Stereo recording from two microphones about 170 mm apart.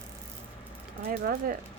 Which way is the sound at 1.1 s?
55° right (ahead or behind).